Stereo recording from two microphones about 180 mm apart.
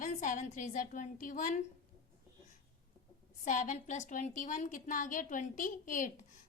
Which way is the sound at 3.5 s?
45° left (ahead or behind).